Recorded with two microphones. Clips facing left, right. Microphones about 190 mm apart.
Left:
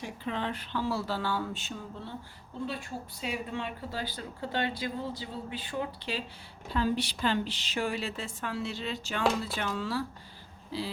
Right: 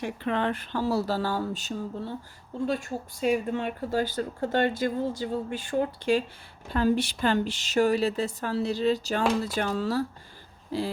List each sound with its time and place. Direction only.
0.0 s speech: 60° right (ahead or behind)